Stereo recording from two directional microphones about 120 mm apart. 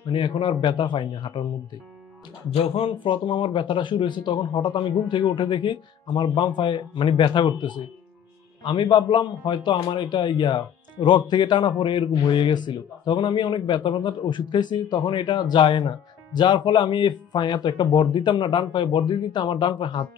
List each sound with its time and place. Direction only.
0.1 s speech: 40° left (ahead or behind)
2.5 s a man's voice: 55° left (ahead or behind)